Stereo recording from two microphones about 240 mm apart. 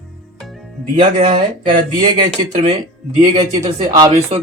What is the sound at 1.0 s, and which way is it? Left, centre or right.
Speech, right.